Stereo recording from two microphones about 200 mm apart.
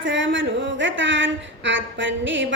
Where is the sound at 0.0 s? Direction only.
65° right (ahead or behind).